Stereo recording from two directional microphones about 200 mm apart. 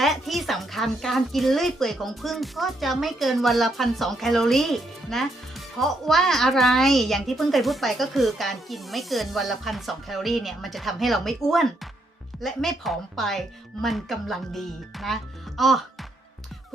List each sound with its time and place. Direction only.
0.0 s speech: centre (ahead or behind)